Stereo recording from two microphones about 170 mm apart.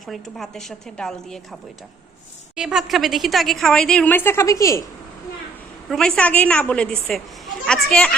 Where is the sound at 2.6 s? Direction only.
5° right (ahead or behind); by 4.8 s 20° left (ahead or behind).